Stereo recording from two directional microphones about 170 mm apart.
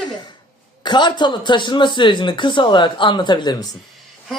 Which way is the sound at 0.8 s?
25° left (ahead or behind).